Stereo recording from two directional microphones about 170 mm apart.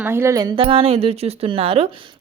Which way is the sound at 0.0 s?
15° right (ahead or behind).